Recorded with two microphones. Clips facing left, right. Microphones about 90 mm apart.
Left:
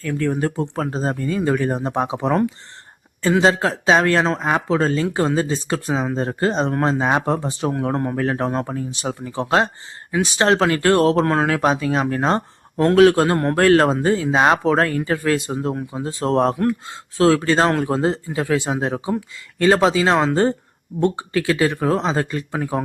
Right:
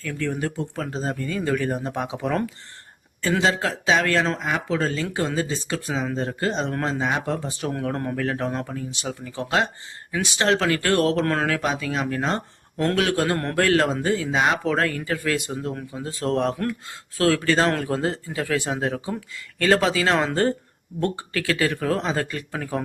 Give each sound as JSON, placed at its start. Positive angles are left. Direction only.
{"t": 0.0, "sound": "speech", "side_deg": 40}
{"t": 3.4, "sound": "speech", "side_deg": 40}
{"t": 8.1, "sound": "speech", "side_deg": 35}
{"t": 11.5, "sound": "speech", "side_deg": 35}
{"t": 13.6, "sound": "speech", "side_deg": 40}